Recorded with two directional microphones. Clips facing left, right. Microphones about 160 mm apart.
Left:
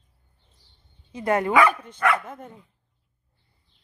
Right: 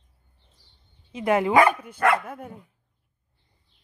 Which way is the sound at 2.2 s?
10° right (ahead or behind).